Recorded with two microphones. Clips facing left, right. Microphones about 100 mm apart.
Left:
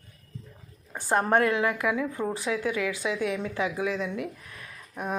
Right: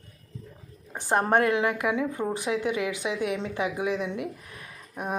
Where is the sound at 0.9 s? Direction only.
20° right (ahead or behind).